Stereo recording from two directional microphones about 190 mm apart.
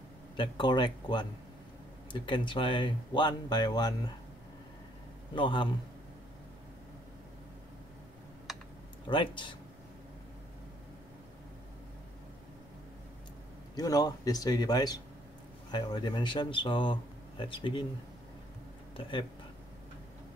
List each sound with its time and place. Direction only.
0.4 s speech: 25° left (ahead or behind)
5.3 s speech: 25° left (ahead or behind)
8.5 s typing: centre (ahead or behind)
9.0 s speech: 25° left (ahead or behind)
13.7 s speech: 20° left (ahead or behind)
18.9 s speech: 25° left (ahead or behind)